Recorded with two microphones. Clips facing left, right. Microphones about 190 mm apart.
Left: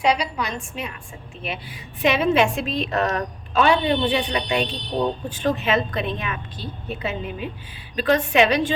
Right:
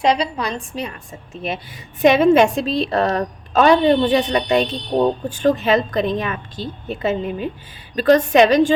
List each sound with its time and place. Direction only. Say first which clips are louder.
0.0 s a woman's voice: right 3 dB; 30° right (ahead or behind)